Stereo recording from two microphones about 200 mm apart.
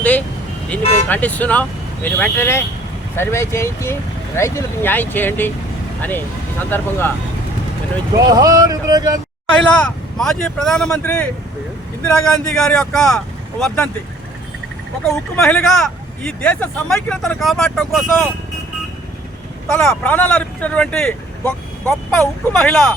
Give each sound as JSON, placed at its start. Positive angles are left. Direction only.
{"t": 0.0, "sound": "vehicle", "side_deg": 10}
{"t": 0.8, "sound": "speech", "side_deg": 30}
{"t": 1.0, "sound": "speech", "side_deg": 10}
{"t": 8.1, "sound": "speech", "side_deg": -15}
{"t": 9.6, "sound": "speech", "side_deg": 5}
{"t": 15.4, "sound": "speech", "side_deg": 5}
{"t": 19.7, "sound": "speech", "side_deg": 5}